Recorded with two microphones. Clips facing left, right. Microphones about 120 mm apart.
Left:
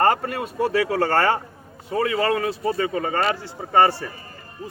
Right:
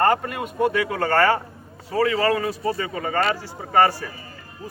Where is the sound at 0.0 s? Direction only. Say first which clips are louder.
Even; 30° left (ahead or behind).